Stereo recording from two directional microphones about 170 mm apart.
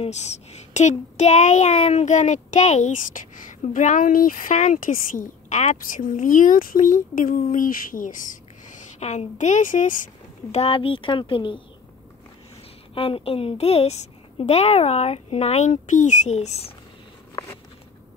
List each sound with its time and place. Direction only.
0.0 s speech: 40° left (ahead or behind)
8.7 s speech: 40° left (ahead or behind)
10.5 s a woman's voice: 35° left (ahead or behind)
12.9 s a woman's voice: 35° left (ahead or behind)